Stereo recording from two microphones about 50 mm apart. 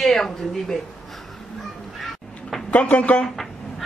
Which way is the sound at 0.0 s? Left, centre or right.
Centre.